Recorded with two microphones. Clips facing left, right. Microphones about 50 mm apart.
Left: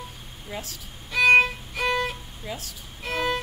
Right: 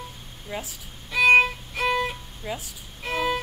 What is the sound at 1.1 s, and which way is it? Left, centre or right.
Violin, centre.